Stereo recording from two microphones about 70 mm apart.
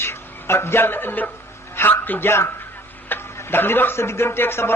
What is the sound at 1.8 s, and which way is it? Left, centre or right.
Dog, left.